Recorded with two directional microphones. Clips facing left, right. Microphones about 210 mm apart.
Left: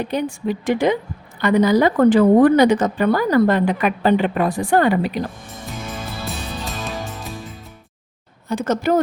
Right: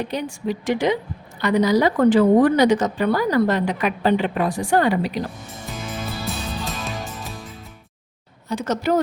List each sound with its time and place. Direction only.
0.1 s speech: 55° left (ahead or behind)
5.7 s music: centre (ahead or behind)
8.4 s speech: 50° left (ahead or behind)